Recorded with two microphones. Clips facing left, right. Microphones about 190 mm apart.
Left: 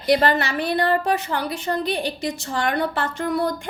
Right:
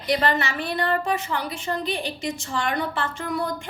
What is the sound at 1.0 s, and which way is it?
A woman's voice, 35° left (ahead or behind).